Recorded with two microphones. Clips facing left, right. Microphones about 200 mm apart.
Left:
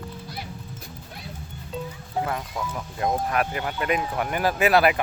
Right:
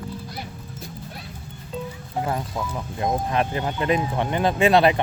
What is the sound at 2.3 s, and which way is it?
Speech, 25° right (ahead or behind).